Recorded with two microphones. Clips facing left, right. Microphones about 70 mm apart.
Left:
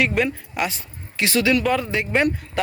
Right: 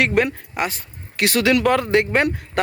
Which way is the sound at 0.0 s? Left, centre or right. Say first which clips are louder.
Right 2 dB; right.